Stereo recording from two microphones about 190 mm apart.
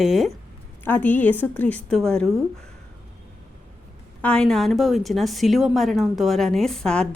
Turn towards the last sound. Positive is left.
turn(degrees=5)  # may be behind; listen again after turning